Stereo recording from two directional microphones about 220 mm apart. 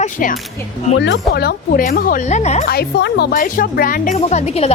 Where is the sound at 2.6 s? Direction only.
45° left (ahead or behind).